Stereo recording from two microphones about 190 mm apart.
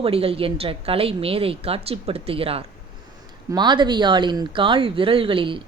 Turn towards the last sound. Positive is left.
turn(degrees=-25)  # may be behind; listen again after turning